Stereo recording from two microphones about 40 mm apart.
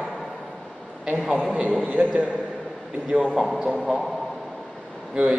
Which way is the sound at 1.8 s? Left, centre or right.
Right.